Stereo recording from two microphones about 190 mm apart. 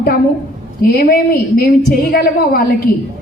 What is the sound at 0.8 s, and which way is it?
A woman's voice, 55° left (ahead or behind).